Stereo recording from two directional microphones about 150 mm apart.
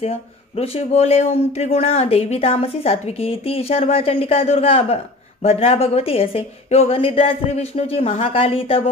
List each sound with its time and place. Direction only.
0.0 s speech: 40° left (ahead or behind)